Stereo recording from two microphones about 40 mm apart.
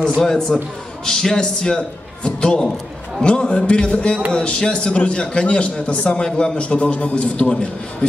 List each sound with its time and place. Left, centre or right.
0.2 s a man's voice: centre